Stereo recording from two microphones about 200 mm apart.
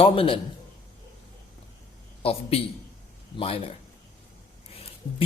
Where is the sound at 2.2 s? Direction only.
30° left (ahead or behind).